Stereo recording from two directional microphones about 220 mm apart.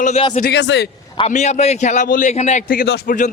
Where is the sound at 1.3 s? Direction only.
35° left (ahead or behind).